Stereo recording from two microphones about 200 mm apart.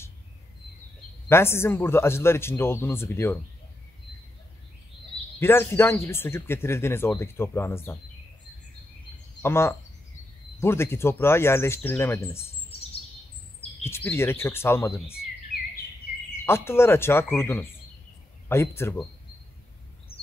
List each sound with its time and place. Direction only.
1.3 s speech: 10° left (ahead or behind)
5.4 s speech: 10° left (ahead or behind)
9.4 s speech: 10° left (ahead or behind)
12.7 s chirp: 30° left (ahead or behind)
13.8 s speech: 10° left (ahead or behind)
16.4 s speech: 10° left (ahead or behind)